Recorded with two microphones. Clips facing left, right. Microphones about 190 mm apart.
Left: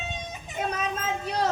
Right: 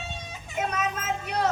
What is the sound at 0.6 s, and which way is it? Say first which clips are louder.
Vehicle: right 1 dB; 30° left (ahead or behind).